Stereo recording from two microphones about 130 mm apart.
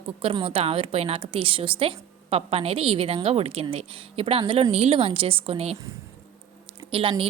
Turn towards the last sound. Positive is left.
turn(degrees=-45)  # may be behind; listen again after turning